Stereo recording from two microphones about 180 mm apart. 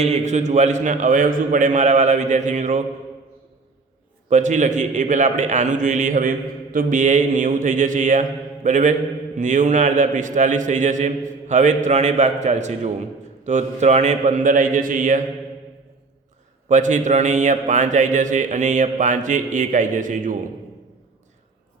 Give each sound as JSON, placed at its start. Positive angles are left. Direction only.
{"t": 0.0, "sound": "a man's voice", "side_deg": -40}
{"t": 4.3, "sound": "a man's voice", "side_deg": -40}
{"t": 16.6, "sound": "a man's voice", "side_deg": -40}